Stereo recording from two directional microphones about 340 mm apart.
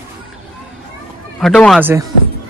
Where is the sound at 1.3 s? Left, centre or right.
Centre.